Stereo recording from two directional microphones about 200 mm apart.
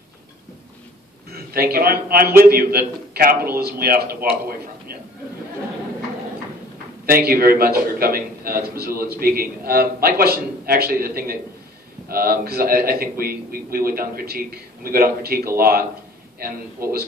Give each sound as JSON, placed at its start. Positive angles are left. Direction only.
{"t": 1.3, "sound": "a man's voice", "side_deg": -50}
{"t": 7.1, "sound": "a man's voice", "side_deg": -50}